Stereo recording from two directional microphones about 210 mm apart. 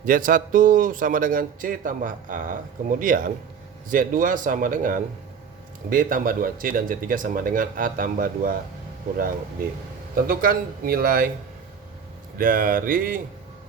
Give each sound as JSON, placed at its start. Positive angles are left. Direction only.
{"t": 0.0, "sound": "a man's voice", "side_deg": -40}
{"t": 10.2, "sound": "a man's voice", "side_deg": -45}
{"t": 12.4, "sound": "a man's voice", "side_deg": -40}